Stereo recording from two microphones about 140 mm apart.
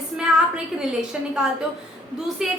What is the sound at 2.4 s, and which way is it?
Speech, 5° right (ahead or behind).